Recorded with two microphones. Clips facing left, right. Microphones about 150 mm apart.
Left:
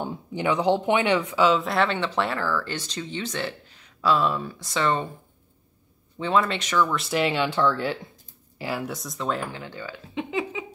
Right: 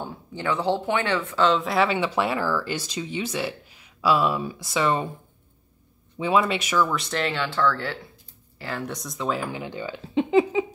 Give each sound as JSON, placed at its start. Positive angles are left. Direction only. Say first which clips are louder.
{"t": 0.0, "sound": "speech", "louder": "left 3 dB", "side_deg": 15}
{"t": 6.1, "sound": "speech", "louder": "right 1 dB", "side_deg": -10}
{"t": 7.1, "sound": "speech", "louder": "left 3 dB", "side_deg": 10}
{"t": 9.5, "sound": "speech", "louder": "right 4 dB", "side_deg": -15}
{"t": 10.1, "sound": "a sound", "louder": "right 9 dB", "side_deg": -35}